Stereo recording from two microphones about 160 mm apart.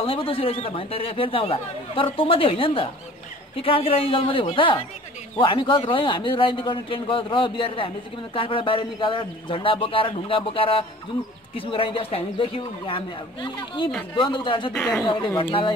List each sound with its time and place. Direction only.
0.0 s speech: 35° left (ahead or behind)
14.7 s speech: 5° left (ahead or behind)